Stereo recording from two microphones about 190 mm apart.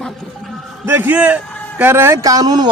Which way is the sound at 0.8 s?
10° right (ahead or behind).